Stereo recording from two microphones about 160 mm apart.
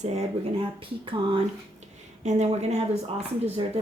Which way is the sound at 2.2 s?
45° right (ahead or behind).